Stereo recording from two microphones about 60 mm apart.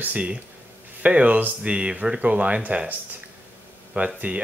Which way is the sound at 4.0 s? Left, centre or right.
Right.